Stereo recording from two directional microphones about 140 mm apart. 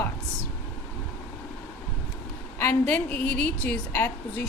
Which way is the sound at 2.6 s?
10° left (ahead or behind).